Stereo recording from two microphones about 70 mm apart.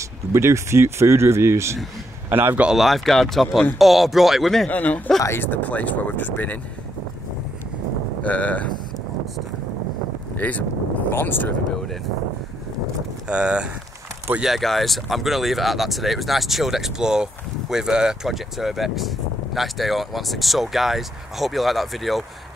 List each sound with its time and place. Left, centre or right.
0.3 s speech: right
2.2 s speech: right
2.7 s speech: centre
4.6 s speech: left
8.2 s cattle: left
10.3 s speech: left
13.3 s speech: centre
14.4 s speech: centre